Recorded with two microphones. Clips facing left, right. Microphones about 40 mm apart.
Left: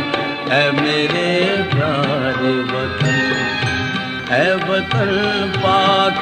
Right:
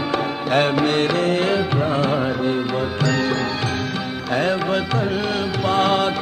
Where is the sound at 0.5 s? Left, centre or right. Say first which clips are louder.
Left 2 dB; left.